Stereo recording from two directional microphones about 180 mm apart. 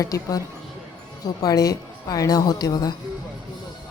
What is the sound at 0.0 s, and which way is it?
A woman's voice, 20° left (ahead or behind).